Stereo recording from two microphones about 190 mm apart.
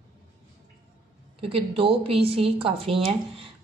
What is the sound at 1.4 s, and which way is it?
A woman's voice, 30° right (ahead or behind).